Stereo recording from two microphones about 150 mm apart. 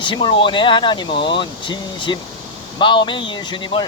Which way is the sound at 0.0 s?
30° left (ahead or behind).